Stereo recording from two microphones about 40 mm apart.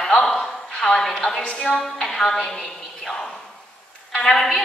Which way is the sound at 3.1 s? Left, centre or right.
Centre.